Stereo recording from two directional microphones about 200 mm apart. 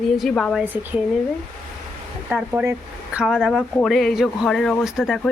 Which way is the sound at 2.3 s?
5° right (ahead or behind).